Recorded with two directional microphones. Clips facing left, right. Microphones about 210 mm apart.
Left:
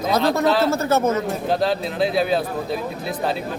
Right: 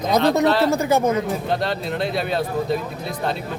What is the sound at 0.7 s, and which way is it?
Speech, 15° right (ahead or behind).